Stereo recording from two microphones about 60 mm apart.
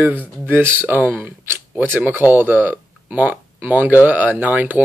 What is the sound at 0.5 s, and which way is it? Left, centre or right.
Speech, right.